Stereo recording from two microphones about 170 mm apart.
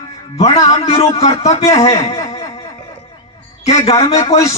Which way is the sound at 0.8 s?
40° left (ahead or behind).